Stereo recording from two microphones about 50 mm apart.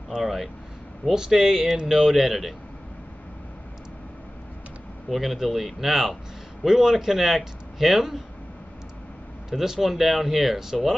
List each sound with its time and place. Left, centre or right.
0.1 s speech: centre
5.1 s speech: centre
9.5 s speech: centre